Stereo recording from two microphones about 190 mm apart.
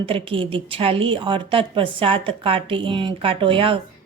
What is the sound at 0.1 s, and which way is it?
A woman's voice, 30° right (ahead or behind).